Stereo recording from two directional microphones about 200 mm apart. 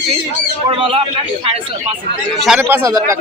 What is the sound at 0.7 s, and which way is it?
Speech, 25° right (ahead or behind).